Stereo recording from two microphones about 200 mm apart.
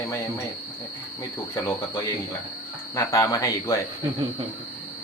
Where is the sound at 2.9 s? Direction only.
15° left (ahead or behind).